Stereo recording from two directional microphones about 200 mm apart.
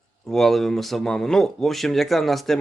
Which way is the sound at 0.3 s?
Centre (ahead or behind).